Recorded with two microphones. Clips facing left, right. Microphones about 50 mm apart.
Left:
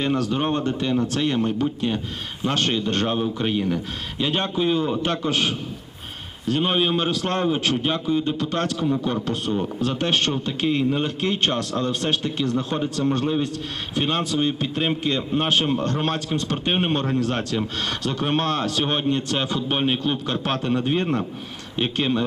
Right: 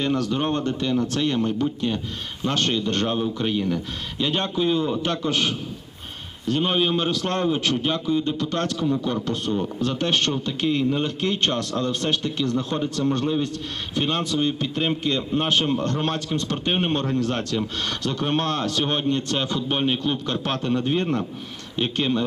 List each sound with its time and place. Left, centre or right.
0.0 s a man's voice: centre